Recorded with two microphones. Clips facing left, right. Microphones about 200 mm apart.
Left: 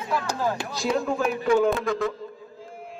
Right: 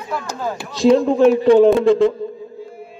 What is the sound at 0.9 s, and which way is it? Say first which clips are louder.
Speech: right 12 dB; 30° right (ahead or behind).